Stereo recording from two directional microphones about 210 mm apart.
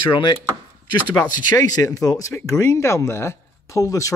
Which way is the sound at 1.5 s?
20° left (ahead or behind).